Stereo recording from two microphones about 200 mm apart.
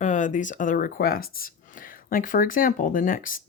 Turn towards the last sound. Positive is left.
turn(degrees=45)  # may be behind; listen again after turning